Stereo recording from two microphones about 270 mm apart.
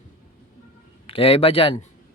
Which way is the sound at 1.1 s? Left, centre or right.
Left.